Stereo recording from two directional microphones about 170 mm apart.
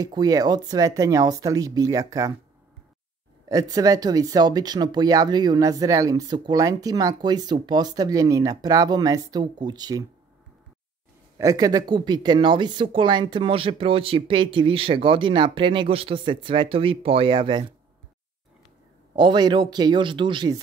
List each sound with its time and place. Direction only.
0.0 s speech: 20° right (ahead or behind)
3.4 s speech: 20° right (ahead or behind)
11.3 s speech: 20° right (ahead or behind)
19.1 s speech: 25° right (ahead or behind)